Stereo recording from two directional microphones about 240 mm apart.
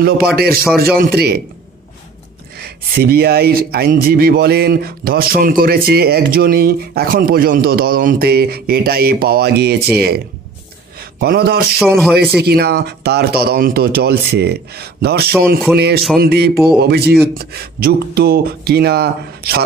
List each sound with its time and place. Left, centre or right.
0.0 s speech: right
2.6 s a man's voice: right